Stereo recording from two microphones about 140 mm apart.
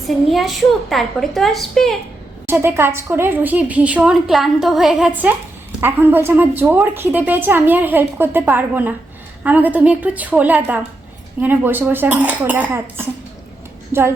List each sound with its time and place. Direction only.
0.3 s a woman's voice: centre (ahead or behind)
2.5 s a woman's voice: 15° right (ahead or behind)